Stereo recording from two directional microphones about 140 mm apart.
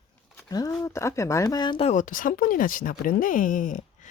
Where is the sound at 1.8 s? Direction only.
60° left (ahead or behind).